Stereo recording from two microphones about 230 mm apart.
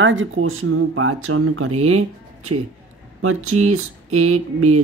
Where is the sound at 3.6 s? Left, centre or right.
Right.